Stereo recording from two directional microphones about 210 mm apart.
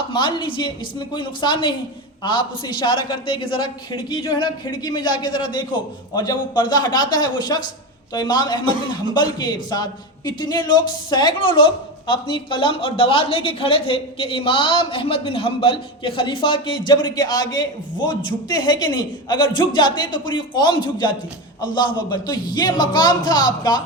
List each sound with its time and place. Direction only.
0.1 s a man's voice: 20° left (ahead or behind)